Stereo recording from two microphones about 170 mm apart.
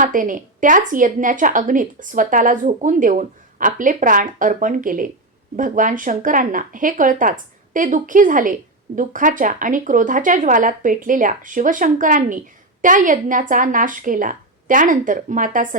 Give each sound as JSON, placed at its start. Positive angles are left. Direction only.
{"t": 0.0, "sound": "a woman's voice", "side_deg": -50}